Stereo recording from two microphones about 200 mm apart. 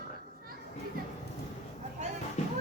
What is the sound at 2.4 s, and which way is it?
Music, 35° left (ahead or behind).